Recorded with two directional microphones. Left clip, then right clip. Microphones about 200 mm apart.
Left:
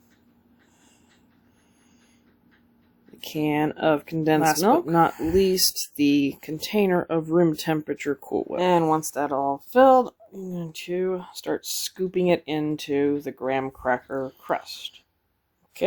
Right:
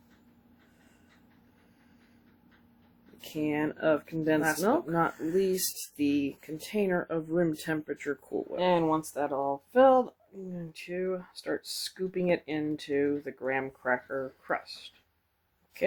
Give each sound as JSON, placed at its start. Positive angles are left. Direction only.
{"t": 3.2, "sound": "speech", "side_deg": 55}